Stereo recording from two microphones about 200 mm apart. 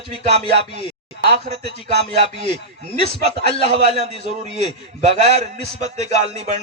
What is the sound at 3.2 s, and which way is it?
Speech, 30° right (ahead or behind).